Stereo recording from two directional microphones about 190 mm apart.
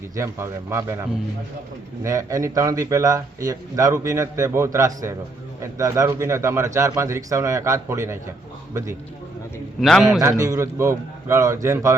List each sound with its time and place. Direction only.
0.2 s speech: 15° right (ahead or behind)
2.0 s speech: 15° right (ahead or behind)
9.8 s a man's voice: centre (ahead or behind)
10.2 s speech: 15° right (ahead or behind)